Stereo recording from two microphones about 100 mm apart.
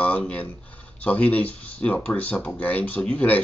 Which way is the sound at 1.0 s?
15° left (ahead or behind).